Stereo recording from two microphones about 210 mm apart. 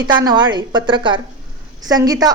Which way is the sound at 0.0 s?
20° right (ahead or behind).